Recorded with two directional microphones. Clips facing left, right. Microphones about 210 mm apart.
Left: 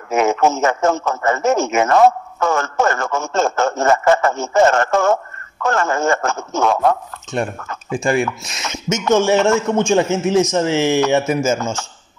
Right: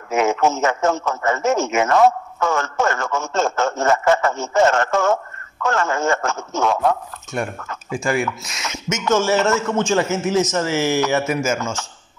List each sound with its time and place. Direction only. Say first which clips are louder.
0.1 s a man's voice: left 2 dB; 50° left (ahead or behind)
7.9 s speech: left 3 dB; 30° left (ahead or behind)
9.1 s a man's voice: left 3 dB; 15° left (ahead or behind)
11.2 s a man's voice: left 3 dB; 30° left (ahead or behind)